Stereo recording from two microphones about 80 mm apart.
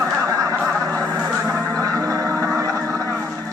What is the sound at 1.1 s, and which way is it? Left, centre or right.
Music, right.